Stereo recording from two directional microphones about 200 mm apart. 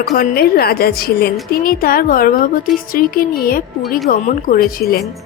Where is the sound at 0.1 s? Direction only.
50° left (ahead or behind).